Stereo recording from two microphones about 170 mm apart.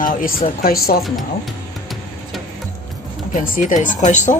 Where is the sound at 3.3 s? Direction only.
55° left (ahead or behind).